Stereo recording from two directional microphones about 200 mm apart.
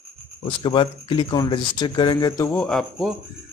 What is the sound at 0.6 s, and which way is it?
Speech, 25° left (ahead or behind).